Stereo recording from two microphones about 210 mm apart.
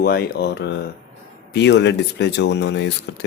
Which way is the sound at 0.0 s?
50° left (ahead or behind).